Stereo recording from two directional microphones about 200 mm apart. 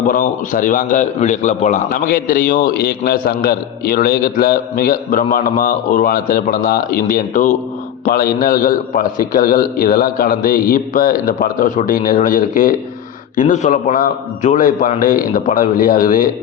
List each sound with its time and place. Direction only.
0.1 s a man's voice: 40° left (ahead or behind)